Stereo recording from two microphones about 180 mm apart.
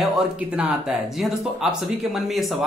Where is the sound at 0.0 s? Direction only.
5° right (ahead or behind).